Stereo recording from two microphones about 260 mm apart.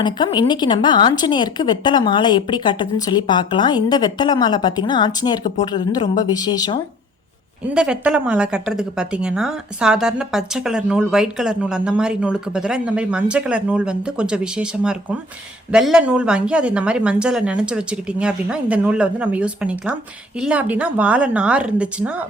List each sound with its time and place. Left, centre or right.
0.0 s a woman's voice: centre
7.7 s a woman's voice: centre